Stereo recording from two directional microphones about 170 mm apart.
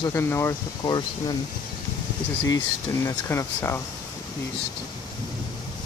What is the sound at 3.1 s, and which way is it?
Speech, 15° left (ahead or behind).